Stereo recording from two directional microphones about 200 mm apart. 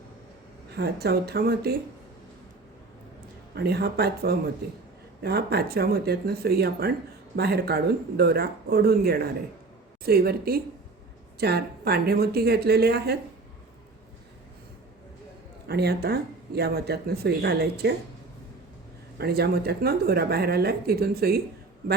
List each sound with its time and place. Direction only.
0.7 s speech: 50° right (ahead or behind)
3.5 s speech: 55° right (ahead or behind)
15.6 s speech: 55° right (ahead or behind)
19.2 s speech: 50° right (ahead or behind)